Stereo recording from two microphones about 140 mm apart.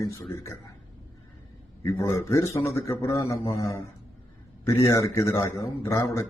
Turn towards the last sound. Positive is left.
turn(degrees=20)  # may be behind; listen again after turning